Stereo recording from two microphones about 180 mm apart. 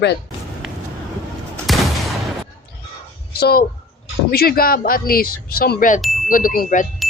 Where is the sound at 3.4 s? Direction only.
60° left (ahead or behind).